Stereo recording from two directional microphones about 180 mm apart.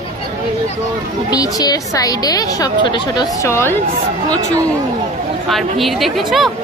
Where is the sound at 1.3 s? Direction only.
20° left (ahead or behind).